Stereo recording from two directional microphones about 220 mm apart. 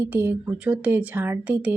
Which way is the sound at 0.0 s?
10° right (ahead or behind).